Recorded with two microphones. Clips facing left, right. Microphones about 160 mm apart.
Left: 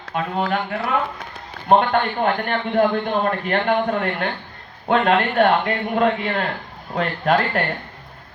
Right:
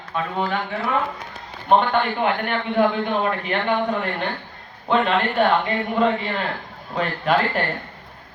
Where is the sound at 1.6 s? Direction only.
45° left (ahead or behind).